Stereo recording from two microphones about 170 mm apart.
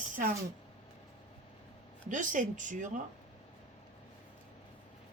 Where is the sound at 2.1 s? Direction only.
50° right (ahead or behind).